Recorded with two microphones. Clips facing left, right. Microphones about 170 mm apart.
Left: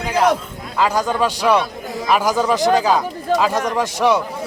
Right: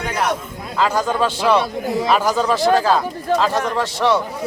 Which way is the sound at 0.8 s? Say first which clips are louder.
Even; 10° left (ahead or behind).